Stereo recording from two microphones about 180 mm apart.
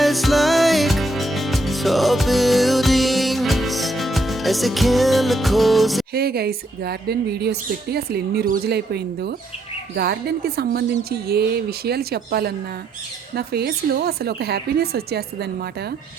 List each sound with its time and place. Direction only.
0.0 s music: centre (ahead or behind)
6.1 s speech: 60° right (ahead or behind)